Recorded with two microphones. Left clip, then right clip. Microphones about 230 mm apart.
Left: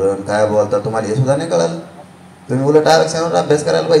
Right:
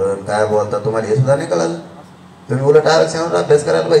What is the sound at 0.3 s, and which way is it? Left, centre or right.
A man's voice, left.